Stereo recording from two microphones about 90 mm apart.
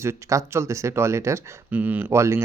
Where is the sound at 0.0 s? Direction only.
35° right (ahead or behind).